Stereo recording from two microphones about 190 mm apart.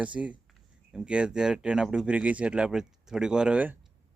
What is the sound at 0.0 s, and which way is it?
Speech, 5° right (ahead or behind).